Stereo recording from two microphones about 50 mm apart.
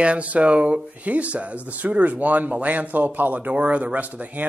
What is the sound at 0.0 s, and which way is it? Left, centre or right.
Speech, right.